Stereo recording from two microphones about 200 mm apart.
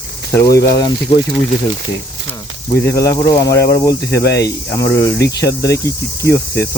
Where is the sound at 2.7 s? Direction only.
15° left (ahead or behind).